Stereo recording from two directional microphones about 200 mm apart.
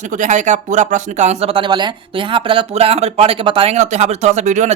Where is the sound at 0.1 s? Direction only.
40° right (ahead or behind).